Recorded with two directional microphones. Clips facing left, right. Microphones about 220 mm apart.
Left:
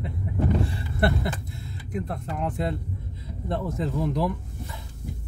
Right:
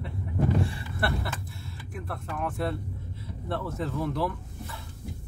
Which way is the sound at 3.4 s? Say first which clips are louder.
Left 3 dB; 15° left (ahead or behind).